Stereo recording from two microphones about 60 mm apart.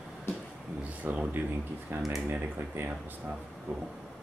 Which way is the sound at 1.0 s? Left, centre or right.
Right.